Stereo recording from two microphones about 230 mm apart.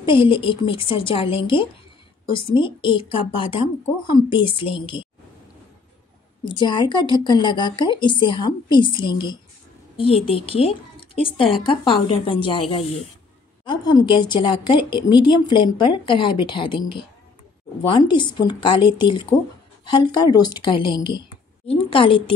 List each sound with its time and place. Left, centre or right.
0.0 s a woman's voice: left
6.4 s a woman's voice: centre
17.8 s a woman's voice: centre